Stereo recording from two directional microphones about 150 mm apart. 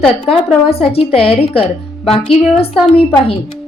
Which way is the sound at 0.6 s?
40° left (ahead or behind).